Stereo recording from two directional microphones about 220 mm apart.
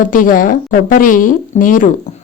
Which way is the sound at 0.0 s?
40° left (ahead or behind).